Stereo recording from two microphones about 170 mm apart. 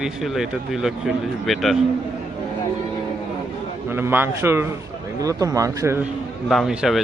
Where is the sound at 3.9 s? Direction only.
15° right (ahead or behind).